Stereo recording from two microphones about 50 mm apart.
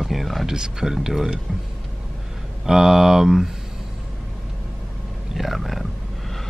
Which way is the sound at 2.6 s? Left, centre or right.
Centre.